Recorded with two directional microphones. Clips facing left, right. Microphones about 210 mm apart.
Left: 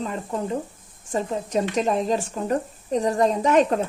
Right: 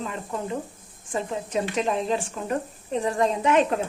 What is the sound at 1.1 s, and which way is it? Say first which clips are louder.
A woman's voice: left 3 dB; 40° left (ahead or behind).